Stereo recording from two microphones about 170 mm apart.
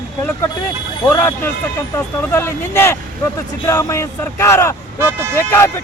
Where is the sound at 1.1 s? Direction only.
10° left (ahead or behind).